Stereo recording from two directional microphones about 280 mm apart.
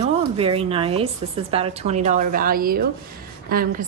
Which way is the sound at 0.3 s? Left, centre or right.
Centre.